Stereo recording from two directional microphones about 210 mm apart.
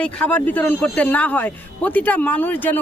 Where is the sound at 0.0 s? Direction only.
5° left (ahead or behind).